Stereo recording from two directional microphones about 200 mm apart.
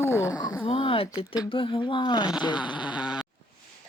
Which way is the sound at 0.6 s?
25° left (ahead or behind).